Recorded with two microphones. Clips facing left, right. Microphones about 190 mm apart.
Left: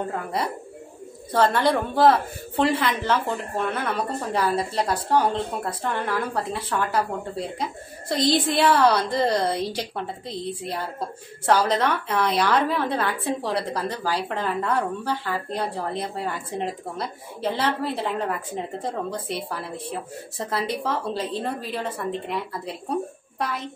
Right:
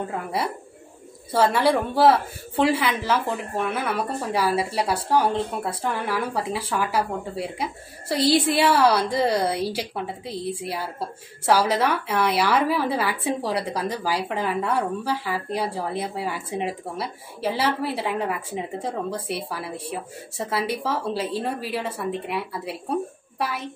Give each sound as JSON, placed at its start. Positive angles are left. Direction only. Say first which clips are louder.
{"t": 0.1, "sound": "a woman's voice", "louder": "even", "side_deg": -5}